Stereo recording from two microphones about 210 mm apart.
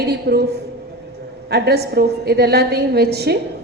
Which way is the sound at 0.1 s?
50° right (ahead or behind).